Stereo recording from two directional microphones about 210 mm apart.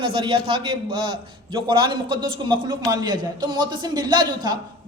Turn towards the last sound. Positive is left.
turn(degrees=-20)  # may be behind; listen again after turning